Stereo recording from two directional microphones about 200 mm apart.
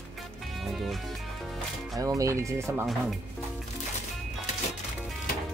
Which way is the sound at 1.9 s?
15° right (ahead or behind).